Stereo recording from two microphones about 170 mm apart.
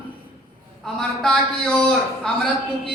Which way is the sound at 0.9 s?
5° left (ahead or behind).